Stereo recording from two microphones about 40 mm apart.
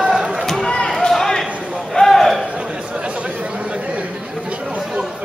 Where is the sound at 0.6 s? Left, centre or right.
Centre.